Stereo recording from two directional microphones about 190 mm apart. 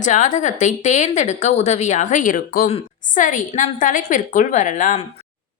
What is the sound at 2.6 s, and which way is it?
Speech, 35° left (ahead or behind).